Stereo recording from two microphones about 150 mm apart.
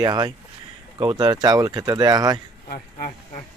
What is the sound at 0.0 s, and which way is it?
Speech, 30° right (ahead or behind).